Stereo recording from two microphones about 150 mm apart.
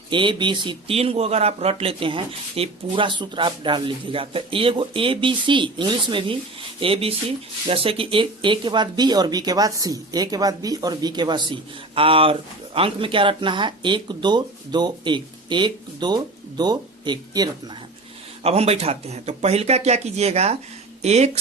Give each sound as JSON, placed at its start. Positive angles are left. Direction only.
{"t": 0.1, "sound": "speech", "side_deg": -35}
{"t": 18.4, "sound": "speech", "side_deg": -45}